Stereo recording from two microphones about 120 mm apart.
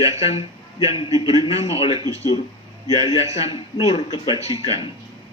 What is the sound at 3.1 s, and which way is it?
Speech, 60° left (ahead or behind).